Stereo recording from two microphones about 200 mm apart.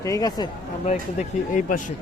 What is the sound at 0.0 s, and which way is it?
Speech, 15° left (ahead or behind).